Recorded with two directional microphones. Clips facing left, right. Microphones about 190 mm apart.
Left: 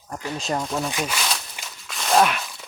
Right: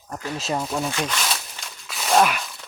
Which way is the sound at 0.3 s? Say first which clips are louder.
Even; 5° right (ahead or behind).